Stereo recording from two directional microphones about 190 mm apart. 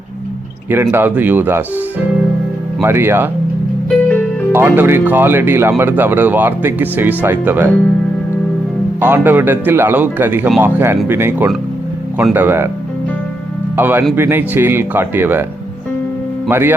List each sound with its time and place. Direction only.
0.7 s speech: 10° right (ahead or behind)
3.8 s music: 5° left (ahead or behind)
4.5 s speech: 10° right (ahead or behind)
9.0 s speech: 10° right (ahead or behind)
13.7 s speech: 10° right (ahead or behind)
16.5 s speech: 10° right (ahead or behind)